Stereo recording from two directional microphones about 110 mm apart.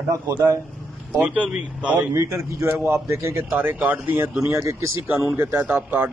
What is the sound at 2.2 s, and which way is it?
A man's voice, 25° right (ahead or behind).